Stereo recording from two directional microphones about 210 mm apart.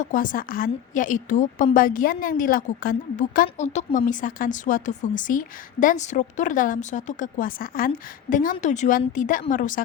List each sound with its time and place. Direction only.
0.0 s a woman's voice: 40° left (ahead or behind)